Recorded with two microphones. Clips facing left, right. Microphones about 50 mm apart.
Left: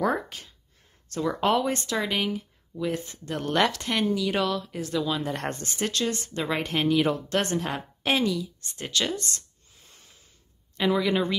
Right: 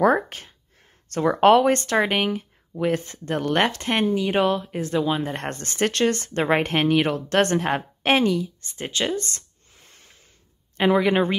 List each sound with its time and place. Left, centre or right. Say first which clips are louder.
0.0 s a sound: right 7 dB; right
1.0 s speech: right 8 dB; right
5.6 s speech: right 6 dB; right